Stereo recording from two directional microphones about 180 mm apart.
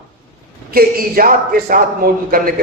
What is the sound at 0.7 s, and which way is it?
Speech, 55° right (ahead or behind).